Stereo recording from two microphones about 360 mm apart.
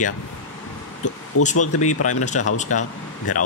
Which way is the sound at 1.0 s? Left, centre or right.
Centre.